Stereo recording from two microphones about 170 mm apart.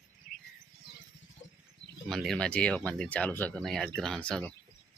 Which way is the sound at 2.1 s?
Centre (ahead or behind).